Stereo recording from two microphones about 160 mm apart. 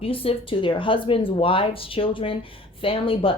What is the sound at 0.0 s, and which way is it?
Speech, 35° left (ahead or behind).